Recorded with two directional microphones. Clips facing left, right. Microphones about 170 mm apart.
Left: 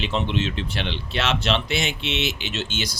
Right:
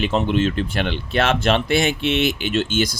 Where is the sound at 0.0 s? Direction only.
45° right (ahead or behind).